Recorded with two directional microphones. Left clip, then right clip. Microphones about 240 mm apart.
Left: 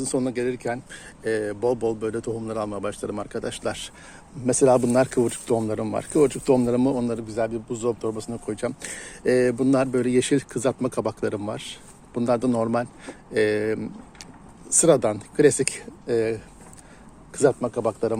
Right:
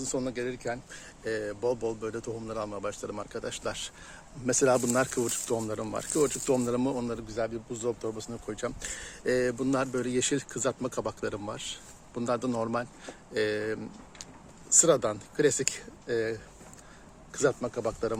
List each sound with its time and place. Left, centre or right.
0.0 s speech: left
4.4 s speech: centre